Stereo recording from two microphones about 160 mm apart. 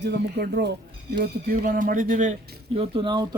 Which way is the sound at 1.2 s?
65° right (ahead or behind).